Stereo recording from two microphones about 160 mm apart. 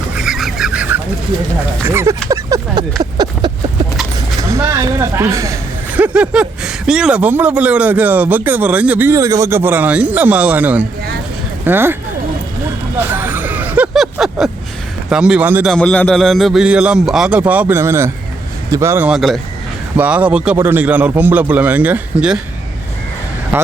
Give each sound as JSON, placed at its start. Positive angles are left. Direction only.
{"t": 0.2, "sound": "a sound", "side_deg": 0}
{"t": 1.8, "sound": "speech", "side_deg": -15}
{"t": 2.3, "sound": "a sound", "side_deg": -20}
{"t": 4.4, "sound": "speech", "side_deg": -20}
{"t": 6.0, "sound": "speech", "side_deg": -5}
{"t": 13.1, "sound": "vehicle", "side_deg": -10}
{"t": 15.1, "sound": "speech", "side_deg": -5}
{"t": 15.7, "sound": "a man's voice", "side_deg": 5}